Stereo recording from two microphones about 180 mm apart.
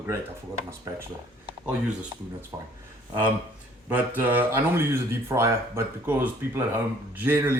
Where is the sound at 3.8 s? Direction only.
10° right (ahead or behind).